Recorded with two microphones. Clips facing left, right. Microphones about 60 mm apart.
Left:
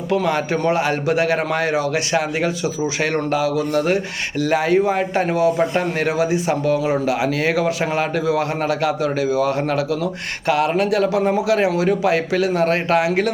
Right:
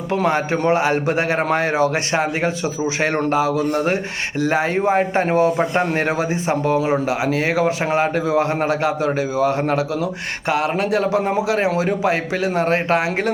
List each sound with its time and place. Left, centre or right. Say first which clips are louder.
0.1 s a man's voice: even; right